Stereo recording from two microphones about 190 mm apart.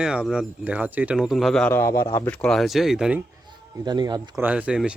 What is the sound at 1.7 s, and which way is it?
Speech, 15° left (ahead or behind).